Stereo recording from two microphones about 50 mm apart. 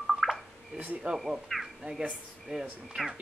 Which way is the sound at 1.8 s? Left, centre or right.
Centre.